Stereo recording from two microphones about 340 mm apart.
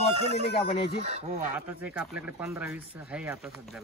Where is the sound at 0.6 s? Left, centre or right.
Centre.